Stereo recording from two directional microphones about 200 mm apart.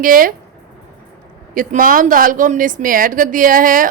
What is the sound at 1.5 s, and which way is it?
A woman's voice, 40° right (ahead or behind).